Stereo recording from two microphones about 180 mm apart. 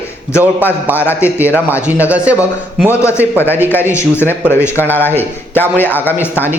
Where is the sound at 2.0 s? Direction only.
10° right (ahead or behind).